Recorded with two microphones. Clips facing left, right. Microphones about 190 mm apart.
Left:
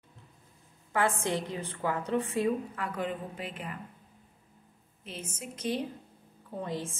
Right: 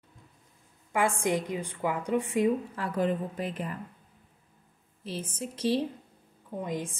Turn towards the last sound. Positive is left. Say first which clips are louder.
# right 2 dB
turn(degrees=-15)  # may be behind; listen again after turning